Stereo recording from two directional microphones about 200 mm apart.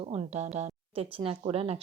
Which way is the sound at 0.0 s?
30° right (ahead or behind).